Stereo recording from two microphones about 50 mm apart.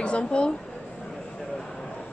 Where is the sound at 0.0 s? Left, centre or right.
Centre.